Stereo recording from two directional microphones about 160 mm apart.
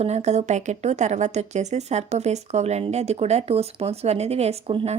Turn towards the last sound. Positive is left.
turn(degrees=-40)  # may be behind; listen again after turning